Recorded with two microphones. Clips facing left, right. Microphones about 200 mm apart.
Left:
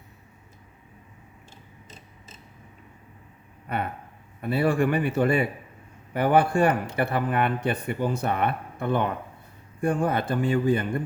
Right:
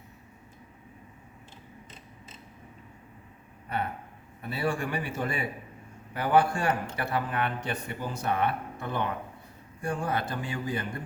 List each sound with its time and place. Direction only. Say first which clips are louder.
4.4 s speech: left 8 dB; 60° left (ahead or behind)